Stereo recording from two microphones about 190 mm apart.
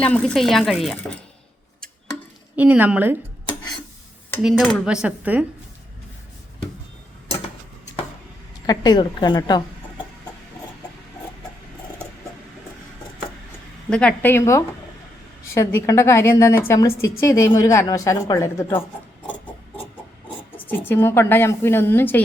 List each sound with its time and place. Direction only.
0.0 s speech: 5° left (ahead or behind)
2.6 s a woman's voice: 10° right (ahead or behind)
4.4 s speech: centre (ahead or behind)
8.6 s a woman's voice: 20° left (ahead or behind)
13.9 s a woman's voice: 5° left (ahead or behind)
20.7 s a woman's voice: 10° left (ahead or behind)